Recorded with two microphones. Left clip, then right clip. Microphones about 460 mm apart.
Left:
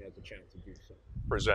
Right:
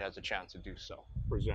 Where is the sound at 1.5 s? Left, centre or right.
Left.